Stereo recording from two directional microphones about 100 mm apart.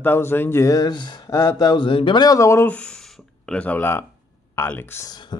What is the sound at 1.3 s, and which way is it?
Speech, 30° left (ahead or behind).